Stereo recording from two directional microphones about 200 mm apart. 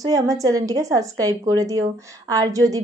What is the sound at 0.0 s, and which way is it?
A woman's voice, 15° right (ahead or behind).